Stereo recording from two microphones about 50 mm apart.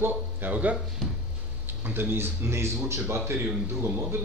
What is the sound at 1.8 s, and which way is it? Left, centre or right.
Speech, right.